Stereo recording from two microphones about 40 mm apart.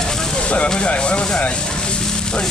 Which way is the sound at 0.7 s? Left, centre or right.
Left.